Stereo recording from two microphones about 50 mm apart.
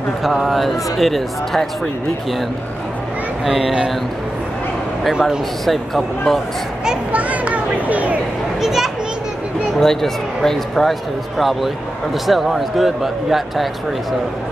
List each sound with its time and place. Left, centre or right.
0.2 s speech: centre
3.4 s speech: centre
5.7 s speech: centre
7.1 s speech: right
8.5 s children playing: centre
9.8 s speech: centre